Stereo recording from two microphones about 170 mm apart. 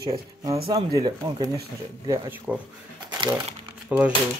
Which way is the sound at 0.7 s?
25° right (ahead or behind).